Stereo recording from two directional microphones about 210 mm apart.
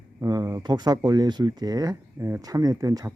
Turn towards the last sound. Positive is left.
turn(degrees=-15)  # may be behind; listen again after turning